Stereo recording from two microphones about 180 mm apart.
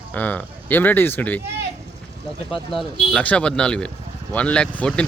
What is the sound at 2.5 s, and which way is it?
Speech, 30° left (ahead or behind).